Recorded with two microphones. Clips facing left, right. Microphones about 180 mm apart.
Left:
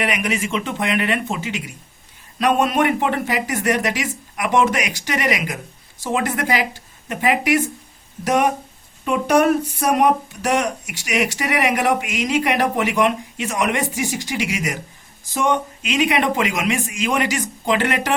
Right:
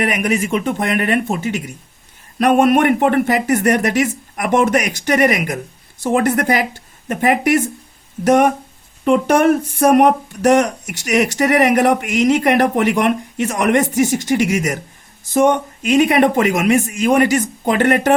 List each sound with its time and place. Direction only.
0.0 s speech: 50° right (ahead or behind)
15.8 s speech: 40° right (ahead or behind)